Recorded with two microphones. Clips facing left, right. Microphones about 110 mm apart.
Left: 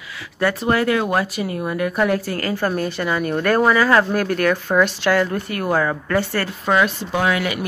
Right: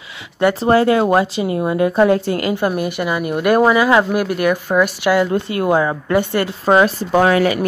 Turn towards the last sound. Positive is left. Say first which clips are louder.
# right 7 dB
turn(degrees=-40)  # may be behind; listen again after turning